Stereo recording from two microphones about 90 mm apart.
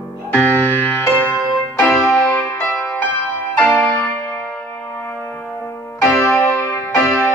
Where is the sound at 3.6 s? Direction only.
15° left (ahead or behind).